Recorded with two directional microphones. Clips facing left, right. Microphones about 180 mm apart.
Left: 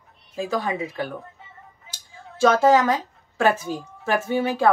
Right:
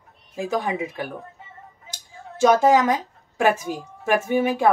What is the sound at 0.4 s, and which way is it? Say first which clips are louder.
Speech: right 1 dB; 15° right (ahead or behind).